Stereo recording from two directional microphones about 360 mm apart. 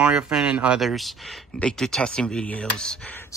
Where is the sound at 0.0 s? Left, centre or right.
Centre.